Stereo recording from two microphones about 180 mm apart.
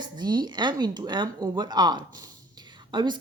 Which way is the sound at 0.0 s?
25° right (ahead or behind).